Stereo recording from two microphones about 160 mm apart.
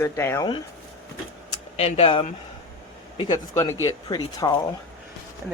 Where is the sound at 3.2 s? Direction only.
20° left (ahead or behind).